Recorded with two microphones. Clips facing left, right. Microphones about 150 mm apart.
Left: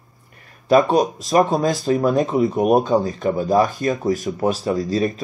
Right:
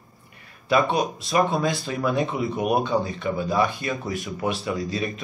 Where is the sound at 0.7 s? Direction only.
40° left (ahead or behind).